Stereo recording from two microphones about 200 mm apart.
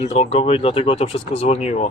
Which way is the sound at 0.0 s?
35° left (ahead or behind).